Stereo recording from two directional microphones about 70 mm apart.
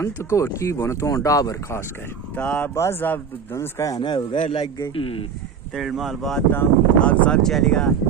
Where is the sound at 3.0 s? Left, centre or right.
Left.